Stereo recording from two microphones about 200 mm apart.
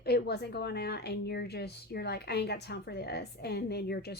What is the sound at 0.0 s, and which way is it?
Speech, 55° left (ahead or behind).